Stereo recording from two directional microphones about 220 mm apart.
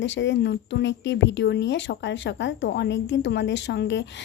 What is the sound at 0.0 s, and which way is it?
Speech, 55° left (ahead or behind).